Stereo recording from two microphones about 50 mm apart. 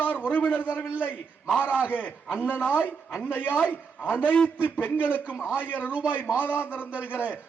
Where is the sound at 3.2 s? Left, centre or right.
Left.